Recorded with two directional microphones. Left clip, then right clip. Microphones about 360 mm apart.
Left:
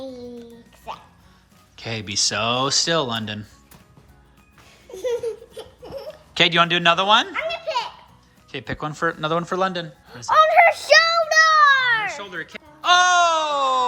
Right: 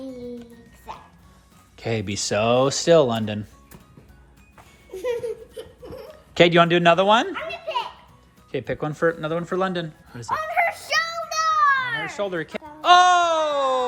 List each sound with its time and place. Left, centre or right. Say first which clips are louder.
0.9 s music: left 4 dB; centre
1.7 s speech: even; centre
6.3 s speech: right 1 dB; centre
8.5 s speech: right 2 dB; centre
10.4 s a sound: left 9 dB; left
12.1 s a sound: right 5 dB; centre